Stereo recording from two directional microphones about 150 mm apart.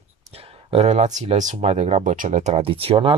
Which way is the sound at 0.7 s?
45° right (ahead or behind).